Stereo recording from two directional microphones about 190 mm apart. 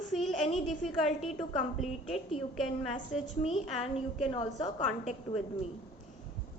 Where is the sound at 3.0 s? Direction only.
30° left (ahead or behind).